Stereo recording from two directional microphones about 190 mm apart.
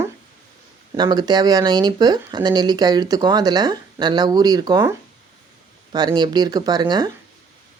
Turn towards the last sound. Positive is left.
turn(degrees=-20)  # may be behind; listen again after turning